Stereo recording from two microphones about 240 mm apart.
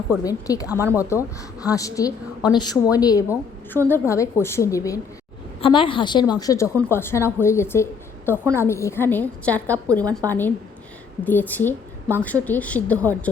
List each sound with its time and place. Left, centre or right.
0.3 s a woman's voice: centre
0.7 s speech: centre
1.6 s a woman's voice: centre
10.0 s speech: centre
10.2 s a woman's voice: centre